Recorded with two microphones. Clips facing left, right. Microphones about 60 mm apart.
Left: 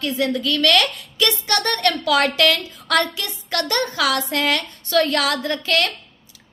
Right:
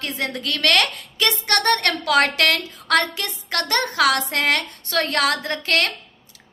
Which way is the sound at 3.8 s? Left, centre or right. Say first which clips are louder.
Right 3 dB; right.